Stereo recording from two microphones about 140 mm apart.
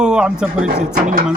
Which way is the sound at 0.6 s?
70° right (ahead or behind).